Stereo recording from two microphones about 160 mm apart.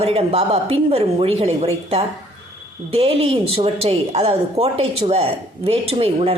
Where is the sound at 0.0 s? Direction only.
40° right (ahead or behind).